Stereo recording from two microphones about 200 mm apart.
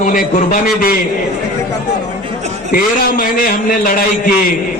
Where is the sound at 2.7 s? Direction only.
45° left (ahead or behind).